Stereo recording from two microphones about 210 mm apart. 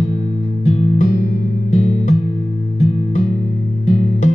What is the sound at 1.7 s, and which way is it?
Music, 30° left (ahead or behind).